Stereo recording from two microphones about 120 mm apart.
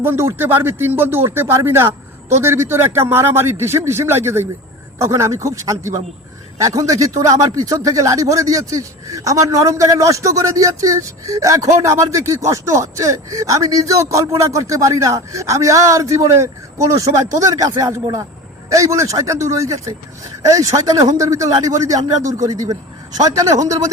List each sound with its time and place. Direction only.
0.0 s a man's voice: 20° right (ahead or behind)